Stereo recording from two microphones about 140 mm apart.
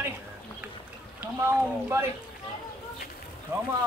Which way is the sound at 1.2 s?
15° right (ahead or behind).